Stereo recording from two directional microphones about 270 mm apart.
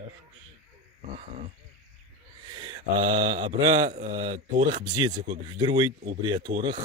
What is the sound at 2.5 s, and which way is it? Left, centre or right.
Mantra, centre.